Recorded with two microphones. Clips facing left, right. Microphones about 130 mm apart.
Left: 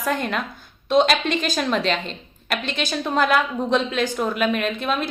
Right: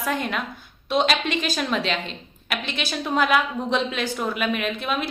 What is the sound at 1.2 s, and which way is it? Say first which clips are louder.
Speech: left 2 dB; 40° left (ahead or behind).